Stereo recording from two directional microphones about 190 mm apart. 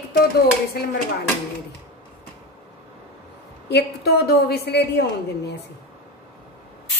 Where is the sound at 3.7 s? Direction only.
55° left (ahead or behind).